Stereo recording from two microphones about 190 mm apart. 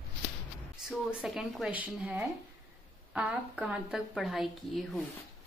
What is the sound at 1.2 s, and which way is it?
A woman's voice, 5° right (ahead or behind).